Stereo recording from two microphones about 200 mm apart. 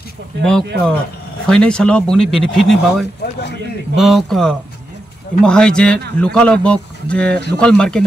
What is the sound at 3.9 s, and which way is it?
A man's voice, centre (ahead or behind).